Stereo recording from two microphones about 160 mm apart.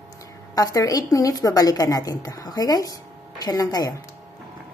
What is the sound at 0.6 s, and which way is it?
A woman's voice, 20° left (ahead or behind).